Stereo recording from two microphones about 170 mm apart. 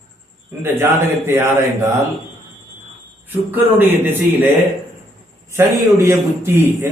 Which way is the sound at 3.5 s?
10° right (ahead or behind).